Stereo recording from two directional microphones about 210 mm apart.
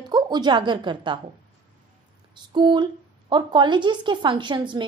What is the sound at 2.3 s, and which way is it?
A woman's voice, 20° right (ahead or behind).